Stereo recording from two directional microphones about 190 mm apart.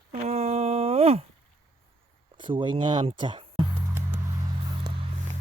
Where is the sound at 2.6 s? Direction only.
25° right (ahead or behind).